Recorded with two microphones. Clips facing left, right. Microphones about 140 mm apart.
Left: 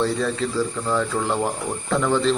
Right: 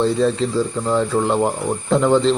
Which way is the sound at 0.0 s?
25° right (ahead or behind).